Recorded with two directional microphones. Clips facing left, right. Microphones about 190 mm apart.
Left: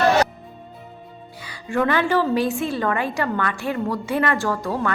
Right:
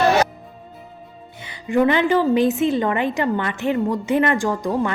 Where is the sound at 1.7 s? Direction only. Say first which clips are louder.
Right 3 dB; 20° right (ahead or behind).